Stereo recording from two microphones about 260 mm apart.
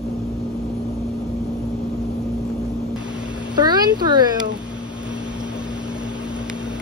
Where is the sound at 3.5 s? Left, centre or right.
Centre.